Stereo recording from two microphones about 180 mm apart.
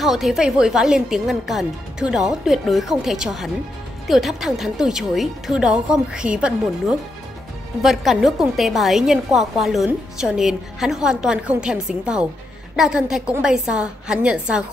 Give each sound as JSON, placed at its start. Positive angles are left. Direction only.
{"t": 0.0, "sound": "a woman's voice", "side_deg": 0}